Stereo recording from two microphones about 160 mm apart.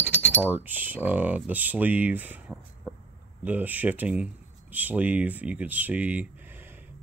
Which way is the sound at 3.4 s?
10° right (ahead or behind).